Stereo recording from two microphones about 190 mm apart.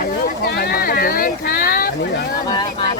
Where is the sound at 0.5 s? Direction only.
55° left (ahead or behind).